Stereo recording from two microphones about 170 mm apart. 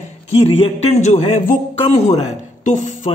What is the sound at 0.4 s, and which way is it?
A man's voice, 35° left (ahead or behind).